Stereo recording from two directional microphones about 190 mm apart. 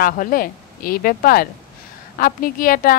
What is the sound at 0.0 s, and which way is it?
A woman's voice, 50° left (ahead or behind).